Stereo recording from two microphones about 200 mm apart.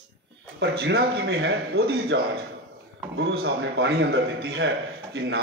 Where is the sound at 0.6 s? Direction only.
60° right (ahead or behind).